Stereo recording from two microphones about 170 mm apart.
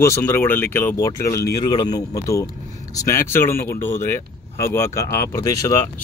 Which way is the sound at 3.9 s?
15° left (ahead or behind).